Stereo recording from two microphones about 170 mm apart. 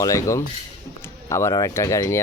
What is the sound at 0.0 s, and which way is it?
Speech, 20° left (ahead or behind).